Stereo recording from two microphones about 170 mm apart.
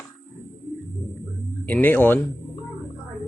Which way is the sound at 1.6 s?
10° left (ahead or behind).